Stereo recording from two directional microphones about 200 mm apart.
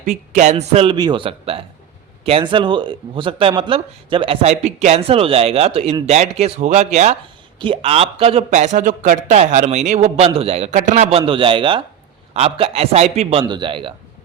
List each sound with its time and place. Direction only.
0.0 s a man's voice: 35° right (ahead or behind)